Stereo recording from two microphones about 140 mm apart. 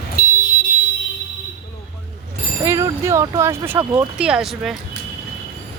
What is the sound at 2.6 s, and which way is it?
Speech, 25° right (ahead or behind).